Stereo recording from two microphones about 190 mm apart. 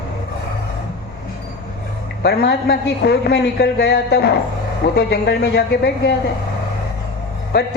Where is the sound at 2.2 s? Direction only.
60° left (ahead or behind).